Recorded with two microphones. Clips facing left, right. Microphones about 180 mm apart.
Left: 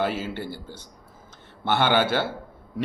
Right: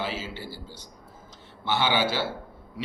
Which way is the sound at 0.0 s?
55° left (ahead or behind).